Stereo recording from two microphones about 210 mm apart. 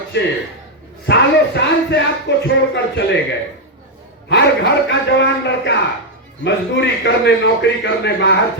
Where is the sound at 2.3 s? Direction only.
55° left (ahead or behind).